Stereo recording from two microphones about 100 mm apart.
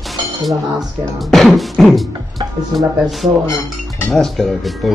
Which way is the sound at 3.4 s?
30° left (ahead or behind).